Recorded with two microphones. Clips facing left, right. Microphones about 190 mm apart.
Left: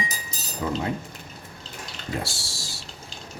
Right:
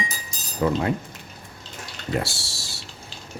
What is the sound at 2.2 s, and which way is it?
Speech, 65° right (ahead or behind).